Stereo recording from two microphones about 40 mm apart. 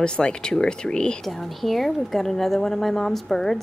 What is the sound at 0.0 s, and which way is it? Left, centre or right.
Speech, left.